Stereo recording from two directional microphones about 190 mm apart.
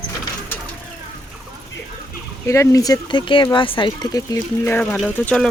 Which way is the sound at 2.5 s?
15° left (ahead or behind).